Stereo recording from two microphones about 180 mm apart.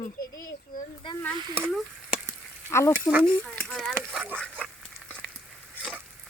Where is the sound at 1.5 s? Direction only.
10° right (ahead or behind).